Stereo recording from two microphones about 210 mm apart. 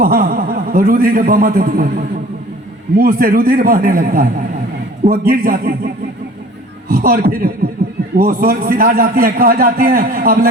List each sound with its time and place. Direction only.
0.0 s a man's voice: 45° right (ahead or behind)
3.0 s a man's voice: 45° right (ahead or behind)
6.8 s a man's voice: 45° right (ahead or behind)